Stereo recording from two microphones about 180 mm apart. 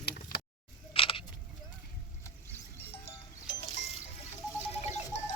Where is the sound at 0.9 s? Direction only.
30° left (ahead or behind).